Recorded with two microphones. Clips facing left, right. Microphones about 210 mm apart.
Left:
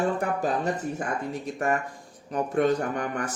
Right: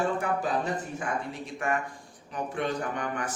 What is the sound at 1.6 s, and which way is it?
Speech, 45° left (ahead or behind).